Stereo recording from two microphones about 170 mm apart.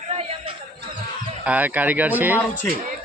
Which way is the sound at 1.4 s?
10° right (ahead or behind).